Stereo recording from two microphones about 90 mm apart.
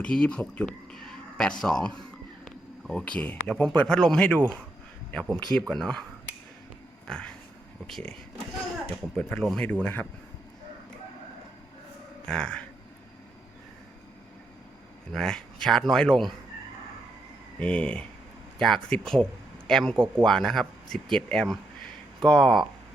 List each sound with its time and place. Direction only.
0.0 s a sound: 10° left (ahead or behind)
3.0 s speech: 20° left (ahead or behind)
7.1 s speech: 10° left (ahead or behind)
9.1 s speech: 5° left (ahead or behind)
9.8 s speech: 15° left (ahead or behind)
12.3 s speech: 10° left (ahead or behind)
15.1 s speech: 5° left (ahead or behind)
17.6 s speech: 10° left (ahead or behind)